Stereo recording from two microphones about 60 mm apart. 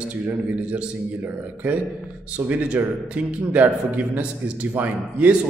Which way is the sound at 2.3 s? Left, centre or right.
Right.